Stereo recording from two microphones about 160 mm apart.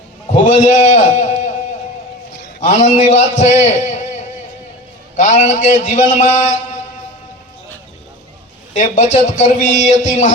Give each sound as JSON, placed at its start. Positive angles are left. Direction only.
{"t": 0.4, "sound": "a man's voice", "side_deg": 50}
{"t": 2.6, "sound": "a man's voice", "side_deg": 50}
{"t": 8.7, "sound": "a man's voice", "side_deg": 50}